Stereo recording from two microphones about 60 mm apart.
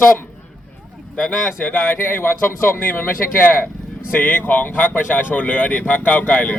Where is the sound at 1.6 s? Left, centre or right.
Left.